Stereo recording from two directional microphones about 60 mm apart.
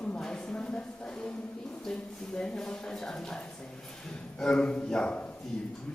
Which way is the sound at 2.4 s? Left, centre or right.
Centre.